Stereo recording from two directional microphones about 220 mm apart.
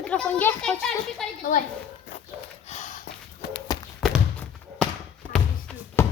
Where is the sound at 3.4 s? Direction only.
45° left (ahead or behind).